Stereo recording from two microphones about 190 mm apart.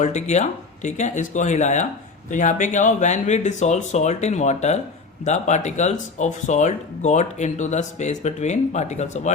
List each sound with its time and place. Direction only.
0.0 s speech: 35° left (ahead or behind)